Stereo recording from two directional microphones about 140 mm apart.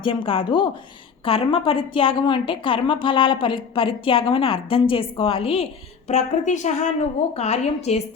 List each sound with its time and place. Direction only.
0.0 s a woman's voice: 40° left (ahead or behind)
6.1 s a woman's voice: 55° left (ahead or behind)